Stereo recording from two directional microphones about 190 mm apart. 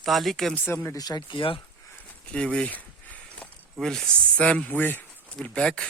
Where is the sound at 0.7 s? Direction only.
15° left (ahead or behind).